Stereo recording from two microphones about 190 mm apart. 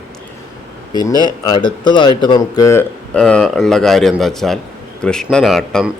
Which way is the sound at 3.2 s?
5° left (ahead or behind).